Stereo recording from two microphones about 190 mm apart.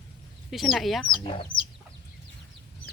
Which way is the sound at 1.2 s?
25° left (ahead or behind).